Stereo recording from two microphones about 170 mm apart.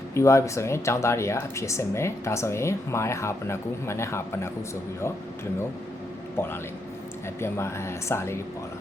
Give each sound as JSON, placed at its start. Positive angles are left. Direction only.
{"t": 0.1, "sound": "speech", "side_deg": 15}
{"t": 6.3, "sound": "a man's voice", "side_deg": 15}